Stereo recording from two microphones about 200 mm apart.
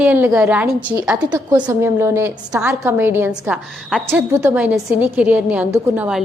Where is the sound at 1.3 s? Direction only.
20° right (ahead or behind).